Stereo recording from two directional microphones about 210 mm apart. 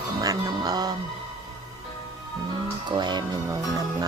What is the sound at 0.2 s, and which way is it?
Music, 15° right (ahead or behind).